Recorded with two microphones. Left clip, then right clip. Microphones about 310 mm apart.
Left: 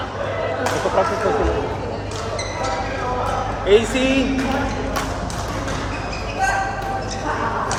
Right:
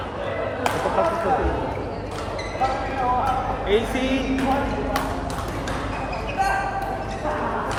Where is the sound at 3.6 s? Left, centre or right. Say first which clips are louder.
Left 8 dB; left.